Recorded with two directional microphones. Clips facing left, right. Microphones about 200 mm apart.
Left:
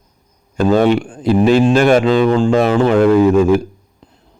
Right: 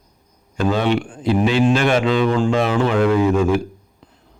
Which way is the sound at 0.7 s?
45° left (ahead or behind).